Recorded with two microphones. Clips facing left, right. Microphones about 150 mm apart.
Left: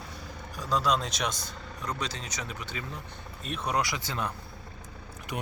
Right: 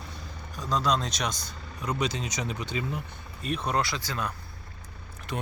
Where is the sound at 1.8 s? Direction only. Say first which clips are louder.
Right 6 dB; 10° right (ahead or behind).